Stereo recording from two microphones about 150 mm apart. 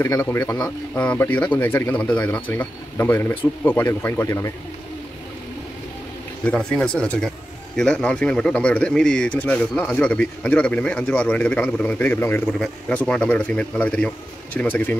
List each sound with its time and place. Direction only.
0.0 s speech: 20° left (ahead or behind)
6.4 s speech: 5° left (ahead or behind)